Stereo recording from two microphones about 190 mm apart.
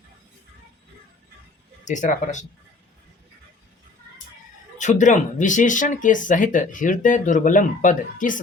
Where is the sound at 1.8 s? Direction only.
40° left (ahead or behind).